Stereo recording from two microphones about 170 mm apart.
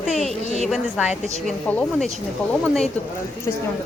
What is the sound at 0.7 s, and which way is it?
Speech, 5° right (ahead or behind).